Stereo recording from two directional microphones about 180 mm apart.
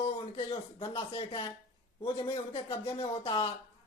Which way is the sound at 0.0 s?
30° left (ahead or behind).